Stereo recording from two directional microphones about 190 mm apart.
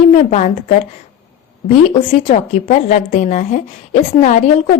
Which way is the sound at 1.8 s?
30° left (ahead or behind).